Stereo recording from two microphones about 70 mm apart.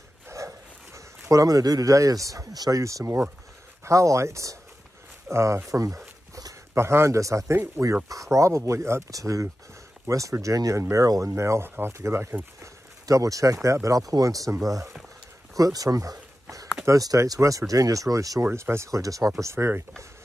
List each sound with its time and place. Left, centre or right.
0.3 s a sound: right
2.8 s speech: right
5.7 s a sound: right
6.7 s speech: right
9.1 s speech: right
13.0 s speech: right
18.4 s speech: right
19.4 s speech: right